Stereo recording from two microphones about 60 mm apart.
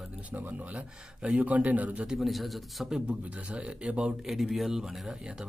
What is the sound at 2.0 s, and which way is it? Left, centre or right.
Speech, centre.